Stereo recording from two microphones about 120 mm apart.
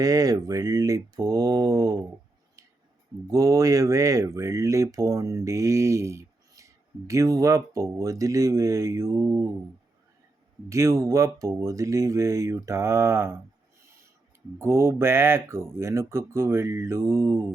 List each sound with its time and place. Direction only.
0.0 s speech: 30° right (ahead or behind)
3.2 s speech: 30° right (ahead or behind)
10.7 s speech: 25° right (ahead or behind)
14.6 s speech: 20° right (ahead or behind)